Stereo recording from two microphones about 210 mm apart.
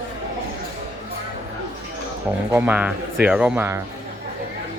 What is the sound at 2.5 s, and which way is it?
Speech, 10° right (ahead or behind).